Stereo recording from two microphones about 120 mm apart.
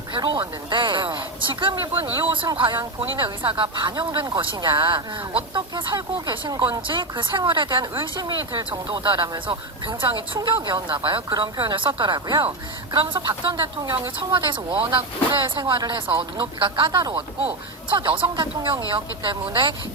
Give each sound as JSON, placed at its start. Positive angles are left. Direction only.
{"t": 0.1, "sound": "speech", "side_deg": -40}